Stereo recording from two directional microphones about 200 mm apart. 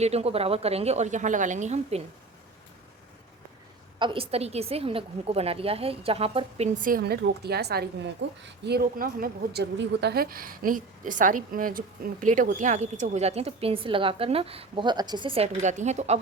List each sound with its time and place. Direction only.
0.0 s a woman's voice: 30° right (ahead or behind)
3.9 s a woman's voice: 25° right (ahead or behind)
6.8 s a woman's voice: 50° right (ahead or behind)